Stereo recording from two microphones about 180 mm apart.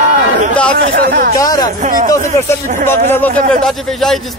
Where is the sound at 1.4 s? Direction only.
20° left (ahead or behind).